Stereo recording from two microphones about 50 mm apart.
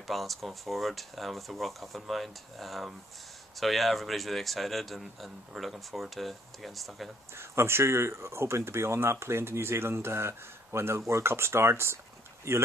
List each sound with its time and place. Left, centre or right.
0.0 s speech: centre
7.3 s speech: right
12.5 s speech: right